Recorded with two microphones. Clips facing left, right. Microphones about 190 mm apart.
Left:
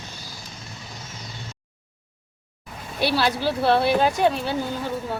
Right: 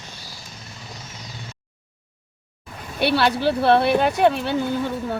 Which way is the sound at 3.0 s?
60° right (ahead or behind).